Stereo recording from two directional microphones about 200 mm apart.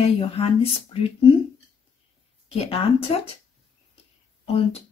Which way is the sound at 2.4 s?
30° left (ahead or behind).